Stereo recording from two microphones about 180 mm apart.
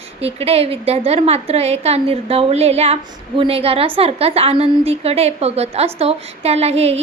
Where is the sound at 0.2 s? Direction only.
35° right (ahead or behind).